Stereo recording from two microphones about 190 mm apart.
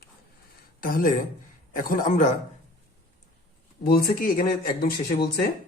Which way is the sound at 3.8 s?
55° left (ahead or behind).